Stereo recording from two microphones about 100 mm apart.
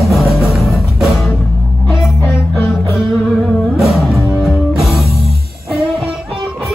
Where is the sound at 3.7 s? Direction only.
Centre (ahead or behind).